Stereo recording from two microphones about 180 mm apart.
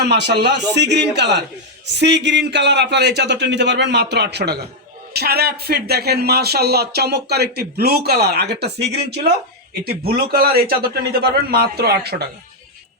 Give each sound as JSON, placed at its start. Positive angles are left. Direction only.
{"t": 0.0, "sound": "a man's voice", "side_deg": -70}